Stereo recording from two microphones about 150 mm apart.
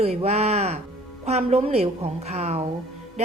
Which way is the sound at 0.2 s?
45° right (ahead or behind).